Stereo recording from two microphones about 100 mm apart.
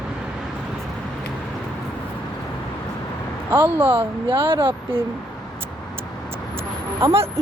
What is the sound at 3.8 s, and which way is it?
Speech, 55° right (ahead or behind).